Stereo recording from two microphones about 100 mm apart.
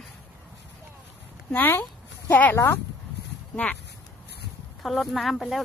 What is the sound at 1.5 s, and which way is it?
Speech, 20° left (ahead or behind).